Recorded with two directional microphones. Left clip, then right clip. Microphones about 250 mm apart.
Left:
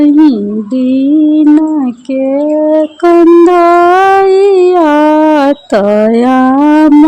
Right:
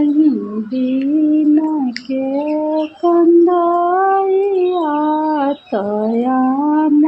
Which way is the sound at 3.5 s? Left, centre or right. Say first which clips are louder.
Left 9 dB; left.